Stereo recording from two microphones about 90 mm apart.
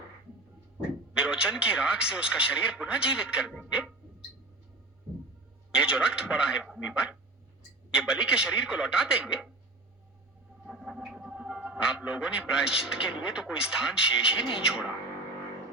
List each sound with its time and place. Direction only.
1.1 s speech: 10° right (ahead or behind)
5.7 s speech: 10° right (ahead or behind)
10.7 s speech: centre (ahead or behind)